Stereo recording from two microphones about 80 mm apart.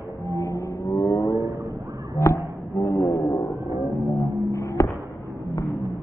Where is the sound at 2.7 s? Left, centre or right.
Left.